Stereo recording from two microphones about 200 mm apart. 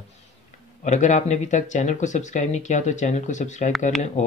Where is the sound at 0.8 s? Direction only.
35° left (ahead or behind).